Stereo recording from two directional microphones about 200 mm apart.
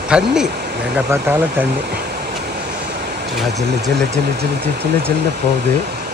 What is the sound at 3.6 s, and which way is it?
Speech, 55° right (ahead or behind).